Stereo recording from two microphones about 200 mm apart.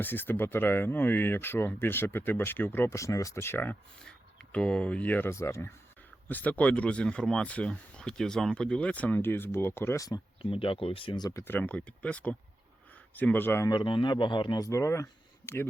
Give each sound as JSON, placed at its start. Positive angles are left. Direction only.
{"t": 0.0, "sound": "speech", "side_deg": 10}